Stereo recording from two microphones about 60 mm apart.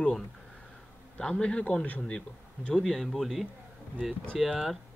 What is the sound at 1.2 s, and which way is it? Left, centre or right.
Speech, centre.